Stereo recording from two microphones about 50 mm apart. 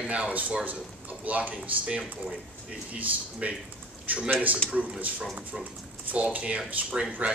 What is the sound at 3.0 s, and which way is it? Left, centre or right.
Speech, right.